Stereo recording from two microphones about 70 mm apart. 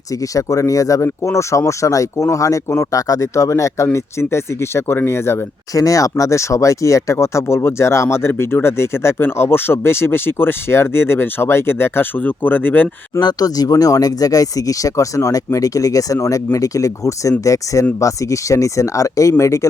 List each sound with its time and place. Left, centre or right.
0.1 s speech: left
1.0 s speech: left
5.7 s speech: left
13.1 s speech: left